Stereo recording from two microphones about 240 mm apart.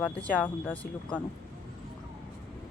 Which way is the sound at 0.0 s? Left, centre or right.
Centre.